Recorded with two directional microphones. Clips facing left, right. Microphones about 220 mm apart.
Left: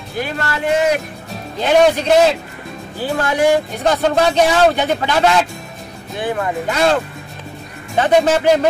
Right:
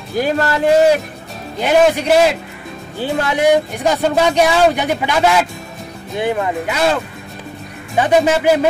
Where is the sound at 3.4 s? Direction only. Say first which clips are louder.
Right 1 dB; 15° right (ahead or behind).